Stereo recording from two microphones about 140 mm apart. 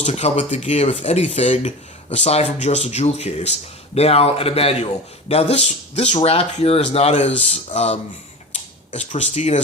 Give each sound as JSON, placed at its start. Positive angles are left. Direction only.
{"t": 0.0, "sound": "speech", "side_deg": 50}